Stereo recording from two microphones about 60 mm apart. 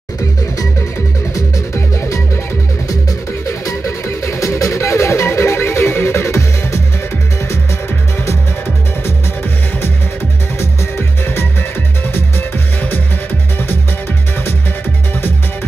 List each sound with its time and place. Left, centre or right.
2.0 s music: left
3.4 s music: left
10.6 s music: left